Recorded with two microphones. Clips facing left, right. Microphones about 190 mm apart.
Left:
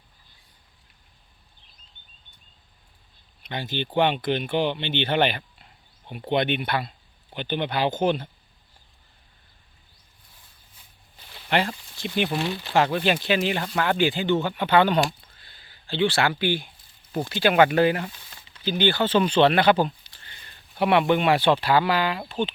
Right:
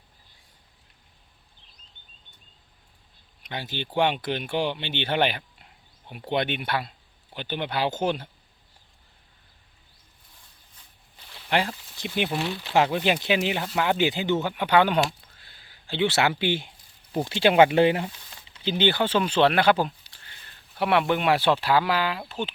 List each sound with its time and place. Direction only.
3.4 s speech: 10° right (ahead or behind)
11.4 s speech: 5° right (ahead or behind)
12.3 s speech: centre (ahead or behind)
12.7 s speech: 15° right (ahead or behind)